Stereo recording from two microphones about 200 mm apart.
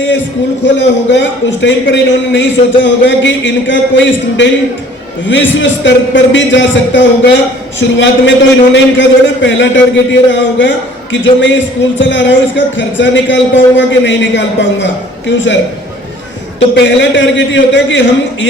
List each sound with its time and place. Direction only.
0.8 s a man's voice: 65° left (ahead or behind)
16.6 s a man's voice: 65° left (ahead or behind)